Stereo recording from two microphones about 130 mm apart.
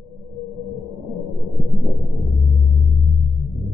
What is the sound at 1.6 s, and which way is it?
Heart sounds, centre (ahead or behind).